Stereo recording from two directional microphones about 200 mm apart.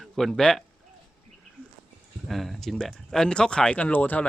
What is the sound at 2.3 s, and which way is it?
Speech, centre (ahead or behind).